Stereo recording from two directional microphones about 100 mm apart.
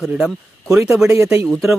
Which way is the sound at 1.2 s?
25° right (ahead or behind).